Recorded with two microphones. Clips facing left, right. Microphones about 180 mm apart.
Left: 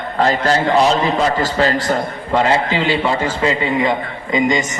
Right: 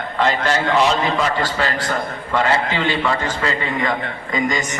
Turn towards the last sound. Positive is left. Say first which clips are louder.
# left 5 dB
turn(degrees=20)  # may be behind; listen again after turning